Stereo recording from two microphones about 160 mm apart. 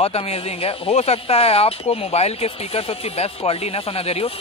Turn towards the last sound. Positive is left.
turn(degrees=40)  # may be behind; listen again after turning